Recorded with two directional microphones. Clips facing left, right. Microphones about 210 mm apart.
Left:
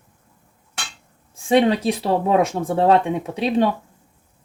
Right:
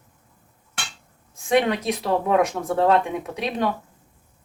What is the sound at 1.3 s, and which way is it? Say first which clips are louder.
Speech: left 4 dB; 30° left (ahead or behind).